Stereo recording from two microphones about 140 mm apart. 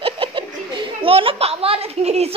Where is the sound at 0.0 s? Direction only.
40° right (ahead or behind).